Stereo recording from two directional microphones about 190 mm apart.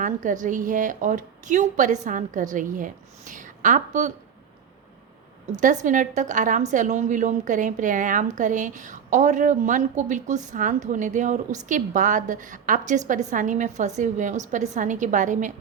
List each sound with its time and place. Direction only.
0.0 s a woman's voice: 45° right (ahead or behind)
5.5 s a woman's voice: 40° right (ahead or behind)